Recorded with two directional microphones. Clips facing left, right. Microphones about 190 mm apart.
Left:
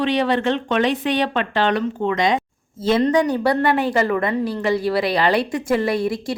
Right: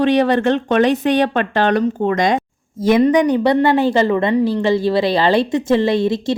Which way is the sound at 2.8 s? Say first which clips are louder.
Right 4 dB; 15° right (ahead or behind).